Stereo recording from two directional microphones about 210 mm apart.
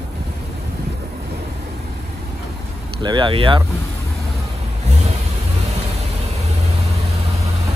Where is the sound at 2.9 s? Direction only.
20° right (ahead or behind).